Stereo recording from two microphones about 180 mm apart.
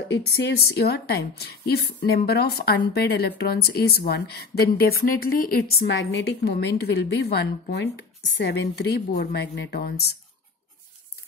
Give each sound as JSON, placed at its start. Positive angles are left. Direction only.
{"t": 0.1, "sound": "speech", "side_deg": 70}